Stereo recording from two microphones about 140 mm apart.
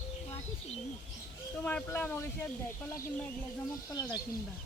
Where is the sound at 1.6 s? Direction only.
15° left (ahead or behind).